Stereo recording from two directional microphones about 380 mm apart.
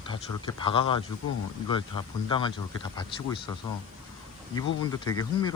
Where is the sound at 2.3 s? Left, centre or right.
Centre.